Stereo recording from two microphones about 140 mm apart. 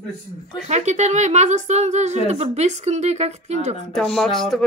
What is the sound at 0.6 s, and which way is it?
A woman's voice, 55° right (ahead or behind).